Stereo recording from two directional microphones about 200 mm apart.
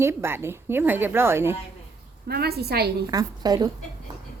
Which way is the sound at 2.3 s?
50° right (ahead or behind).